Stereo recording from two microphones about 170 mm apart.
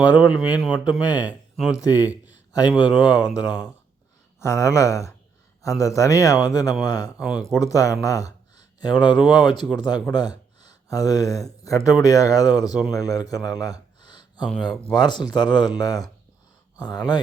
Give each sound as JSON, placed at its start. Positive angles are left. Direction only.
{"t": 0.3, "sound": "speech", "side_deg": -5}
{"t": 0.9, "sound": "a man's voice", "side_deg": 25}
{"t": 1.3, "sound": "speech", "side_deg": -5}
{"t": 1.7, "sound": "a man's voice", "side_deg": 20}
{"t": 3.1, "sound": "speech", "side_deg": -5}
{"t": 4.4, "sound": "a man's voice", "side_deg": 15}
{"t": 7.2, "sound": "speech", "side_deg": -5}
{"t": 7.5, "sound": "a man's voice", "side_deg": 20}